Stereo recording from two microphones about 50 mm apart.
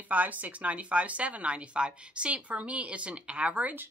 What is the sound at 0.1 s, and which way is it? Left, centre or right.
Speech, right.